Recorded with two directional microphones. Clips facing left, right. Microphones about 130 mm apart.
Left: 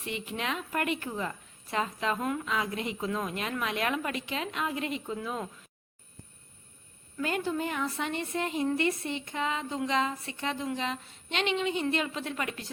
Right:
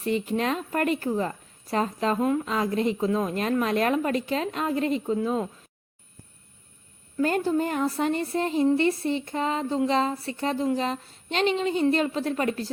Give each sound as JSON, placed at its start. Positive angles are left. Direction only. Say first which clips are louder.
{"t": 0.0, "sound": "a woman's voice", "louder": "right 9 dB", "side_deg": -40}
{"t": 7.2, "sound": "a woman's voice", "louder": "right 7 dB", "side_deg": -40}